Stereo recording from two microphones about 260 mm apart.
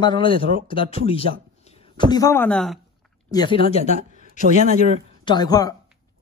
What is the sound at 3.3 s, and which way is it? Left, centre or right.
Speech, centre.